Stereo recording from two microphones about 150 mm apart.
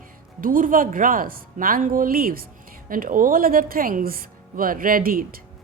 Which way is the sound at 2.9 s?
65° right (ahead or behind).